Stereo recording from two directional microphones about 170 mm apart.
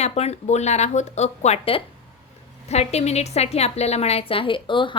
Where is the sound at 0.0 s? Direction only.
40° left (ahead or behind).